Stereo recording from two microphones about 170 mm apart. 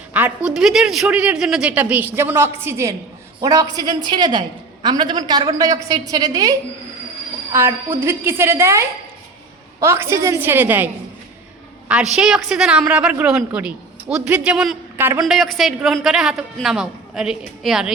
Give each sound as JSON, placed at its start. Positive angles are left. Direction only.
{"t": 0.1, "sound": "a woman's voice", "side_deg": -10}
{"t": 7.5, "sound": "a woman's voice", "side_deg": -15}
{"t": 11.9, "sound": "a woman's voice", "side_deg": -5}
{"t": 15.3, "sound": "a woman's voice", "side_deg": 0}